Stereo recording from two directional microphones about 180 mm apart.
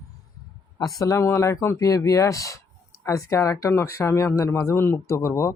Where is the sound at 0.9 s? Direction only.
15° left (ahead or behind).